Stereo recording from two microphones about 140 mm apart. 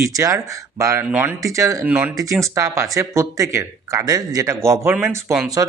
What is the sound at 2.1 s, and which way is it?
Speech, 25° right (ahead or behind).